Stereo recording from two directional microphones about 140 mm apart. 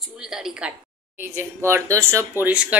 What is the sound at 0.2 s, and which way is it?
Speech, 5° right (ahead or behind).